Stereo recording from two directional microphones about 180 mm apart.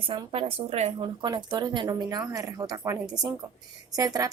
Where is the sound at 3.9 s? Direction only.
20° right (ahead or behind).